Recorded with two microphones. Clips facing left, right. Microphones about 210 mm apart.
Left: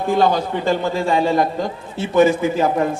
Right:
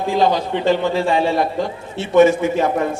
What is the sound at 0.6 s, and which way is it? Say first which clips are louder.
Speech: right 5 dB; 45° left (ahead or behind).